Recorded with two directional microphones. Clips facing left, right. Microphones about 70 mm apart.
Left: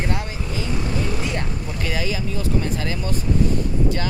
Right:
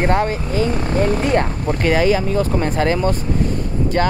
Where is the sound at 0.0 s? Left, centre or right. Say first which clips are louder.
Right 10 dB; right.